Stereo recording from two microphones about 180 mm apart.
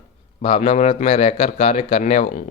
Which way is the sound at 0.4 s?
35° left (ahead or behind).